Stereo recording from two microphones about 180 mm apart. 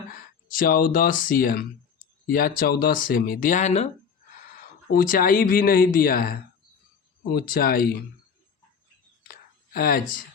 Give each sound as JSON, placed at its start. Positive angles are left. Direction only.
{"t": 0.1, "sound": "speech", "side_deg": 50}
{"t": 4.5, "sound": "speech", "side_deg": 50}
{"t": 9.2, "sound": "whispering", "side_deg": 55}